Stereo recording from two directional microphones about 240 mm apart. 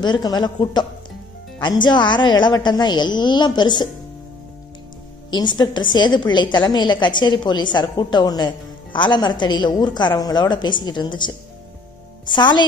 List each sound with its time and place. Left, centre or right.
0.0 s a woman's voice: centre
5.3 s a woman's voice: centre